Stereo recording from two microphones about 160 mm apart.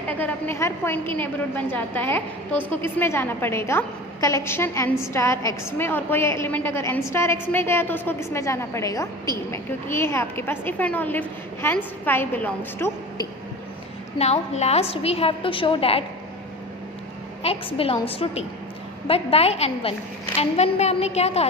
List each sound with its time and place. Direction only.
0.1 s a woman's voice: 10° left (ahead or behind)
14.2 s a woman's voice: 45° left (ahead or behind)
17.4 s a woman's voice: 35° left (ahead or behind)